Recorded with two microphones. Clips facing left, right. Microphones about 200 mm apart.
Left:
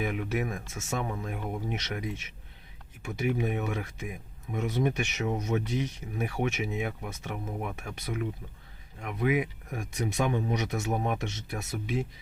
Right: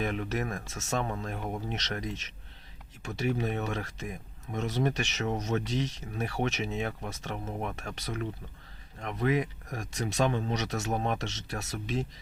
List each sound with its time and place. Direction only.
0.0 s speech: 10° left (ahead or behind)